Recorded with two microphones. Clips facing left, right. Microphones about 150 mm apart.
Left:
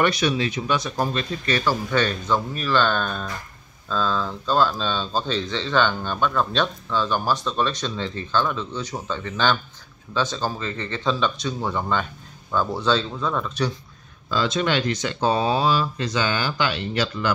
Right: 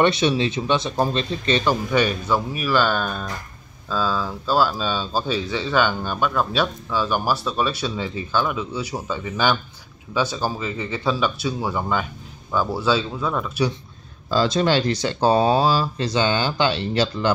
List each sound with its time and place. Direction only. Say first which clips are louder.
0.0 s speech: right 3 dB; 25° right (ahead or behind); by 13.7 s 5° right (ahead or behind)
14.3 s speech: right 4 dB; 35° right (ahead or behind)